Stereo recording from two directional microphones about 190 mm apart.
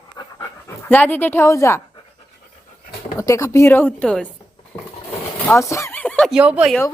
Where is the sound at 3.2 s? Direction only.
15° left (ahead or behind).